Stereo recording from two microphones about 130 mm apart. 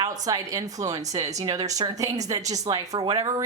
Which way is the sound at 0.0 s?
30° right (ahead or behind).